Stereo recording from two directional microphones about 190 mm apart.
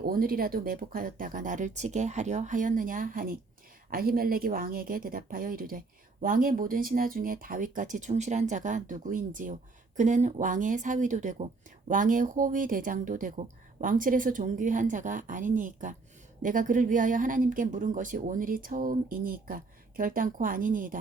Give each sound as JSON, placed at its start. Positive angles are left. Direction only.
{"t": 0.0, "sound": "a woman's voice", "side_deg": -50}